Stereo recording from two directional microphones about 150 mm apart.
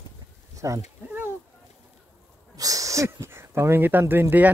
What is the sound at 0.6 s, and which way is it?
Speech, 20° right (ahead or behind).